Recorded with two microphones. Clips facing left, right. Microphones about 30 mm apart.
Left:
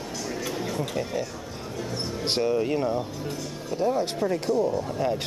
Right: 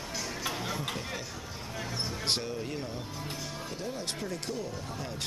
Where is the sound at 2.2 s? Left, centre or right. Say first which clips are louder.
Left 8 dB; centre.